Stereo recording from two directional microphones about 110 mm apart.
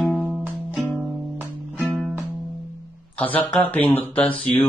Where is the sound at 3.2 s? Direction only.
15° left (ahead or behind).